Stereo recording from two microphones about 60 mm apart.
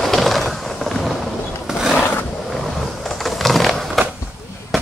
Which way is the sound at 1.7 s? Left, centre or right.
Centre.